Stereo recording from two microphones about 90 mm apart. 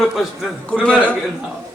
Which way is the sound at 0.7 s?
10° left (ahead or behind).